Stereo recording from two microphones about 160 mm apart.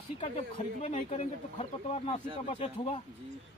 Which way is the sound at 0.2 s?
45° left (ahead or behind).